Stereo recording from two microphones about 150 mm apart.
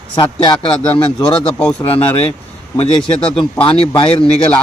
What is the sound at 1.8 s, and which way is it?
Speech, 40° left (ahead or behind).